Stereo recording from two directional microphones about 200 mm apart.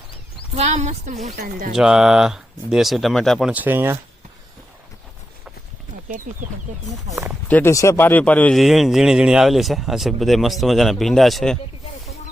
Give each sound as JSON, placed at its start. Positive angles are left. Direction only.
{"t": 0.5, "sound": "a woman's voice", "side_deg": -35}
{"t": 1.7, "sound": "a man's voice", "side_deg": -5}
{"t": 7.1, "sound": "speech", "side_deg": -15}
{"t": 7.4, "sound": "a man's voice", "side_deg": 10}